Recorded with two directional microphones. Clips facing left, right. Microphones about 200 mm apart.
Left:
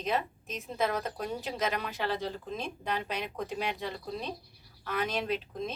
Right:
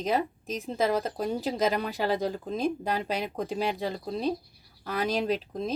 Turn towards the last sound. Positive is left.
turn(degrees=-35)  # may be behind; listen again after turning